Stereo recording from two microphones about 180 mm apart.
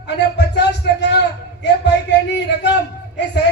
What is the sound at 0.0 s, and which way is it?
Speech, 70° left (ahead or behind).